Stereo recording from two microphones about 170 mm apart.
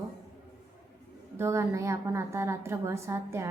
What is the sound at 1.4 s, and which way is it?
A woman's voice, 15° right (ahead or behind).